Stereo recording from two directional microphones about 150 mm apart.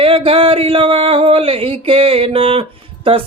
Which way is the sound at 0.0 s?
40° right (ahead or behind).